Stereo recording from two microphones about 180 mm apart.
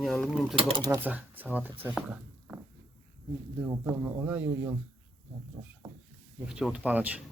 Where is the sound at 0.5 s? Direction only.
30° right (ahead or behind).